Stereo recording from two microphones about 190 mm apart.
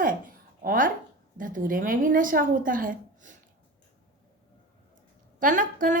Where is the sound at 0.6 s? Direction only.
45° right (ahead or behind).